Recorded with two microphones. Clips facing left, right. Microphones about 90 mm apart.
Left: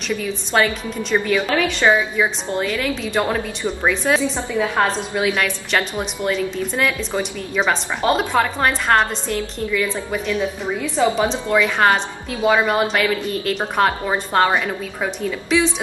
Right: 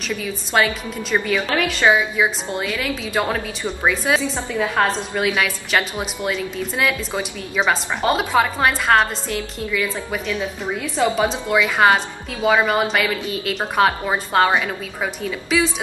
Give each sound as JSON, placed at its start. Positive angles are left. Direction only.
{"t": 0.2, "sound": "a woman's voice", "side_deg": -5}